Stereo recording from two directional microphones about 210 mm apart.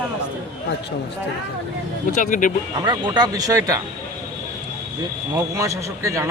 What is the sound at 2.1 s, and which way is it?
Speech, 40° left (ahead or behind).